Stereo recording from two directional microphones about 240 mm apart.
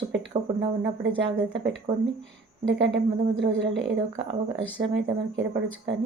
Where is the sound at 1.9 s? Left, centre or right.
Centre.